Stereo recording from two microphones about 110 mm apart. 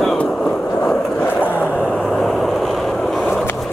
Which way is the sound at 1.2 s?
20° left (ahead or behind).